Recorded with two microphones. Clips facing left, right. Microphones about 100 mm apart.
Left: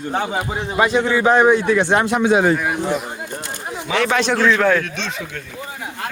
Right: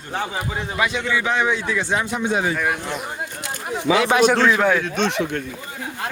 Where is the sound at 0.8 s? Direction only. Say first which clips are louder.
Left 7 dB; 35° left (ahead or behind); by 2.6 s 75° left (ahead or behind).